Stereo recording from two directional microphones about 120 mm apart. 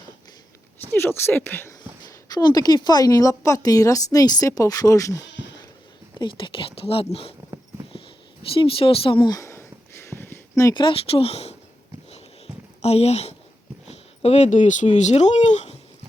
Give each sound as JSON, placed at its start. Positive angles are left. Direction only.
{"t": 0.9, "sound": "speech", "side_deg": 20}
{"t": 2.3, "sound": "a woman's voice", "side_deg": 35}
{"t": 6.1, "sound": "speech", "side_deg": 45}
{"t": 8.4, "sound": "speech", "side_deg": 50}
{"t": 9.4, "sound": "a sound", "side_deg": 20}
{"t": 10.8, "sound": "speech", "side_deg": 50}
{"t": 12.8, "sound": "speech", "side_deg": 60}